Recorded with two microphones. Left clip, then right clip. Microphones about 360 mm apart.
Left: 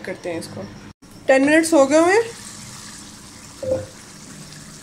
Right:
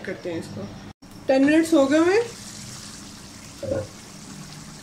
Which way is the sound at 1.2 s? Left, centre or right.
Centre.